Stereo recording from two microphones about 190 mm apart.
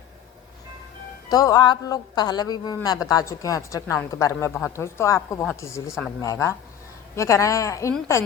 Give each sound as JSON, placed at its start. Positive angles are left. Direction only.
{"t": 1.3, "sound": "a woman's voice", "side_deg": 20}